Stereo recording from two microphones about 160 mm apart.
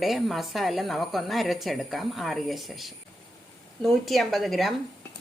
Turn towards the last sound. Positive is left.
turn(degrees=0)  # may be behind; listen again after turning